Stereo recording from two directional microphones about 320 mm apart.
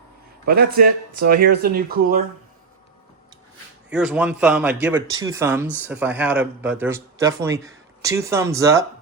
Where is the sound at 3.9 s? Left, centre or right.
Centre.